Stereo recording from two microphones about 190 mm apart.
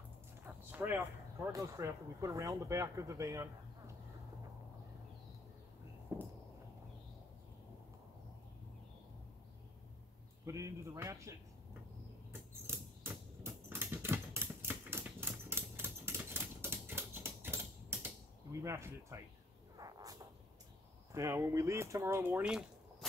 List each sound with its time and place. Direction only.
0.5 s a sound: 10° right (ahead or behind)
1.5 s speech: 15° right (ahead or behind)
6.1 s a sound: 10° right (ahead or behind)
10.4 s speech: 15° right (ahead or behind)
12.6 s typing: 10° right (ahead or behind)
19.8 s cat: 20° right (ahead or behind)
21.1 s speech: 15° right (ahead or behind)